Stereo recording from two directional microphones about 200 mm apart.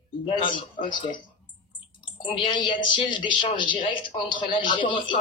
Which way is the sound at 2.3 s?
25° left (ahead or behind).